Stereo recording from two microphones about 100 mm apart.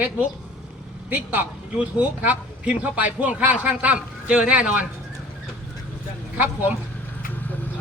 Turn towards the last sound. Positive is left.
turn(degrees=-15)  # may be behind; listen again after turning